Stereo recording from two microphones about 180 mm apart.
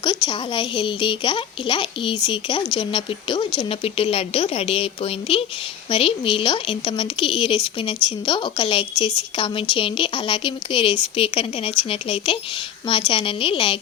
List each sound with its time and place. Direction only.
0.0 s speech: 25° left (ahead or behind)